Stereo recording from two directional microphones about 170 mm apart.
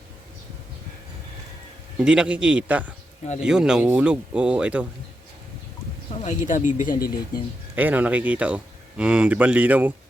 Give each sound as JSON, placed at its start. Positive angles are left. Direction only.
{"t": 2.0, "sound": "speech", "side_deg": -5}
{"t": 6.2, "sound": "speech", "side_deg": 50}
{"t": 7.8, "sound": "speech", "side_deg": -10}